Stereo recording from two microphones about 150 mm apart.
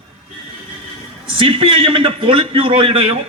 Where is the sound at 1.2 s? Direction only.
35° right (ahead or behind).